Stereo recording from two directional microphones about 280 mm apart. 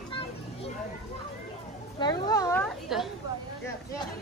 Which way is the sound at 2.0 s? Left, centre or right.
Centre.